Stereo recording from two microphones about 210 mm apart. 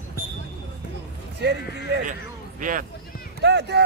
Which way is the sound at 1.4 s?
55° right (ahead or behind).